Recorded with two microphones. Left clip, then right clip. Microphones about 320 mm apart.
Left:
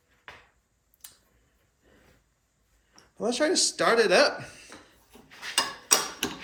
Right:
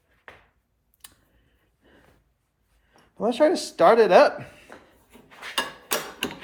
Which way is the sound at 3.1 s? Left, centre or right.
Centre.